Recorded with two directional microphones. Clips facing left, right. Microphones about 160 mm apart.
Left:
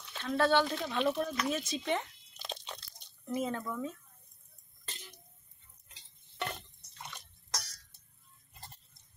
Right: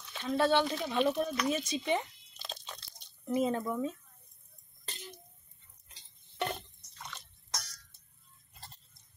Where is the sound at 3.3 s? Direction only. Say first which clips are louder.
Right 4 dB; 20° right (ahead or behind).